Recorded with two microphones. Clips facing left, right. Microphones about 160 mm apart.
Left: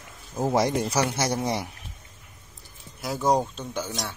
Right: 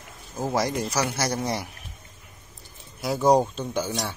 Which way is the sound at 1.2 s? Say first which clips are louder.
Left 1 dB; 10° left (ahead or behind).